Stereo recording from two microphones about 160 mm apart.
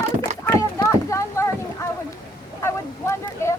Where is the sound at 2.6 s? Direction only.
15° left (ahead or behind).